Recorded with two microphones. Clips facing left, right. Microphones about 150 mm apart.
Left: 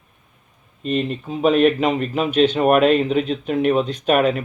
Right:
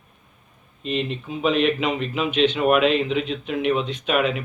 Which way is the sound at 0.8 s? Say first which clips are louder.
Left 4 dB; 45° left (ahead or behind).